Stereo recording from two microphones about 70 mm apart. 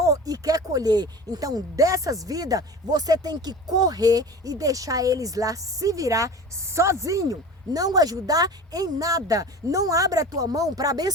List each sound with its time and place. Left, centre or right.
0.0 s speech: right